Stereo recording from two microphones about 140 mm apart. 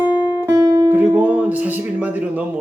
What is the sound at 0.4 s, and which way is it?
Music, 20° right (ahead or behind).